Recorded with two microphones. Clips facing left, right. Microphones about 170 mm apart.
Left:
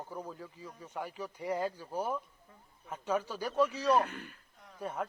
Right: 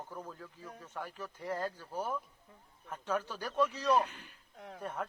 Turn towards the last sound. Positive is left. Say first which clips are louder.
# left 2 dB
turn(degrees=10)  # may be behind; listen again after turning